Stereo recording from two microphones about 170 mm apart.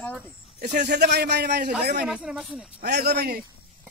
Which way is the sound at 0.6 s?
80° right.